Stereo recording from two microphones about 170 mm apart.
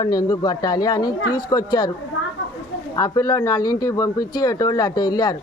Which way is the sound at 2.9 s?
20° left (ahead or behind).